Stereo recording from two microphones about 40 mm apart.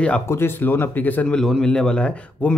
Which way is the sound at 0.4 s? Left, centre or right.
Left.